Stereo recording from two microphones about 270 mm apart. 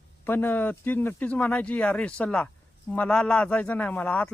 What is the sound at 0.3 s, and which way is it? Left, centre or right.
Speech, centre.